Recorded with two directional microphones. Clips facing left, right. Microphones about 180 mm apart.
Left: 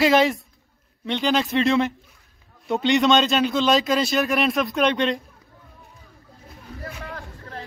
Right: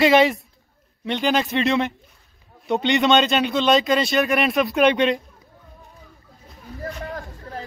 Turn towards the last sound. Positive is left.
turn(degrees=-35)  # may be behind; listen again after turning